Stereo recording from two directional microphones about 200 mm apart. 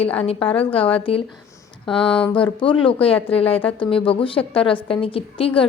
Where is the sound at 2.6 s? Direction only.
25° left (ahead or behind).